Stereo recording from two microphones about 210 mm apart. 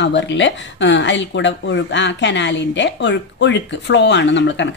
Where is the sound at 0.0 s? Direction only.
60° left (ahead or behind).